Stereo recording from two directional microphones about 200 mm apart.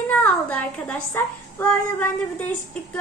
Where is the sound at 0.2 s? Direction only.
5° left (ahead or behind).